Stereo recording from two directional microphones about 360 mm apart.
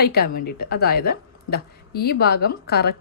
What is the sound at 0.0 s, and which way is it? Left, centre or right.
A woman's voice, left.